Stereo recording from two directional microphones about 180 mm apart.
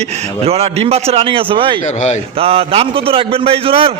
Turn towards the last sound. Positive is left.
turn(degrees=-30)  # may be behind; listen again after turning